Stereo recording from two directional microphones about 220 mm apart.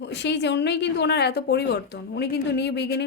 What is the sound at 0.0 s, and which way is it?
A woman's voice, 50° left (ahead or behind).